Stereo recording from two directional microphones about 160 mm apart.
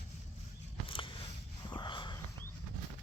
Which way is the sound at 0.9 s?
30° left (ahead or behind).